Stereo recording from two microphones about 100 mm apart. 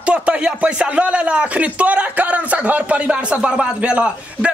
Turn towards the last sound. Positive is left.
turn(degrees=-10)  # may be behind; listen again after turning